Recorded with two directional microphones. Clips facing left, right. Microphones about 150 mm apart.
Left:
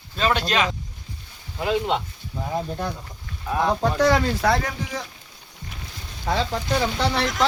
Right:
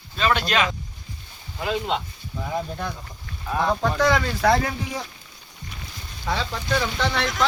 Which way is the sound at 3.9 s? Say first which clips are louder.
Left 2 dB; 40° left (ahead or behind).